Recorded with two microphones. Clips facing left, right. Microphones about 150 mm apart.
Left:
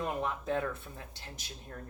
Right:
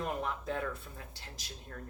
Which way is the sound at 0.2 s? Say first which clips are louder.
Left 3 dB; 20° left (ahead or behind).